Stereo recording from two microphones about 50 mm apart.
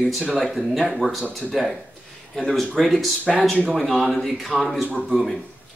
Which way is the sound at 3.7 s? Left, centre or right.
Centre.